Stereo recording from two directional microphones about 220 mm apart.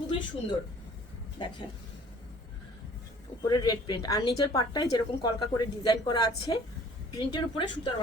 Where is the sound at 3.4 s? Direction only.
20° left (ahead or behind).